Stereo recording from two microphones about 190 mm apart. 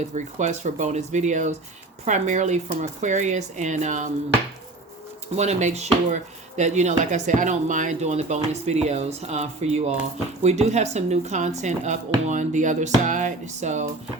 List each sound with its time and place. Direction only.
0.1 s speech: 40° right (ahead or behind)
5.4 s speech: 35° right (ahead or behind)